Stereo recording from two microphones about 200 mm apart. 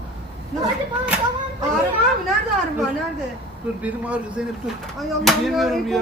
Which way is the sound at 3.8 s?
5° right (ahead or behind).